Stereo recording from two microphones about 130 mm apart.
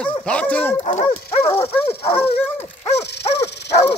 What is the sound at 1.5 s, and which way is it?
Bow-wow, 15° left (ahead or behind).